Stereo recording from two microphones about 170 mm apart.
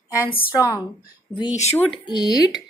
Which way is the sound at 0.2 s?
10° left (ahead or behind).